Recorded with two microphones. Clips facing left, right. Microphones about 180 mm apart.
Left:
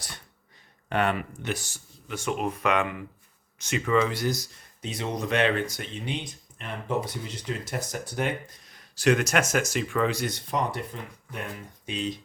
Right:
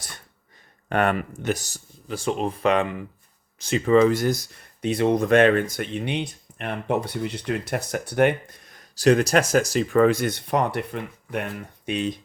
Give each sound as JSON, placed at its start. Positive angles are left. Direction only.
{"t": 0.9, "sound": "speech", "side_deg": -50}
{"t": 11.9, "sound": "speech", "side_deg": -60}